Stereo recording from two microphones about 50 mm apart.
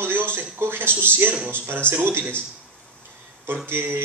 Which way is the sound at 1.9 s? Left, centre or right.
Right.